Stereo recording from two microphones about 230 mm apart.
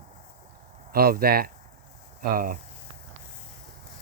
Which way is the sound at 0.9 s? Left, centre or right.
Right.